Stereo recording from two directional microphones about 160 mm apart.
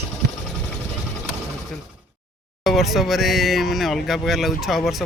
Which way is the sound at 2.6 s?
Centre (ahead or behind).